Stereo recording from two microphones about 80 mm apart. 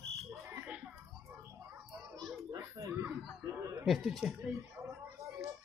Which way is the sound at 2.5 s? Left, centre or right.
Right.